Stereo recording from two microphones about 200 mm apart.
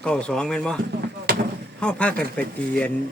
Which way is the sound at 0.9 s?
55° right (ahead or behind).